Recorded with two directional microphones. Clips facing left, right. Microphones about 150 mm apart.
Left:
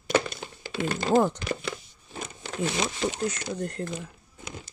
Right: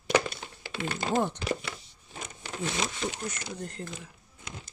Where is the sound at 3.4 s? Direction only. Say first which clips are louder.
Left 7 dB; 60° left (ahead or behind).